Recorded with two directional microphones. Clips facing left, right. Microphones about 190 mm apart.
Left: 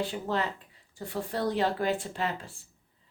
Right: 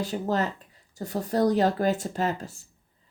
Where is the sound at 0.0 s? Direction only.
40° right (ahead or behind).